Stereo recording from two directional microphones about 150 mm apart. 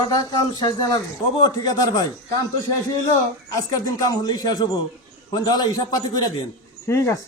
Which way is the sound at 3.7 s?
25° left (ahead or behind).